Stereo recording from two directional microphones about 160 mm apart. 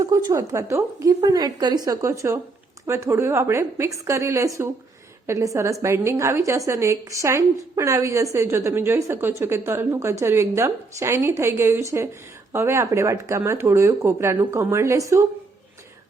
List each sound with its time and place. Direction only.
0.0 s a woman's voice: 20° right (ahead or behind)